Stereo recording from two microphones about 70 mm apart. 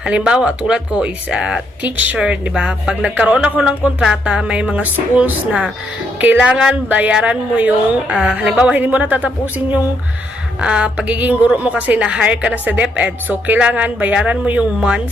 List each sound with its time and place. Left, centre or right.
0.0 s speech: centre
1.8 s a woman's voice: right